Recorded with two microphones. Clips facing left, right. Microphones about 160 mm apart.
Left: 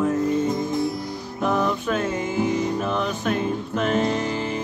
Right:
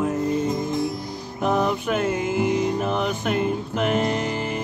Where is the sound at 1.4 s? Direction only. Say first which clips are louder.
Right 1 dB; 15° right (ahead or behind).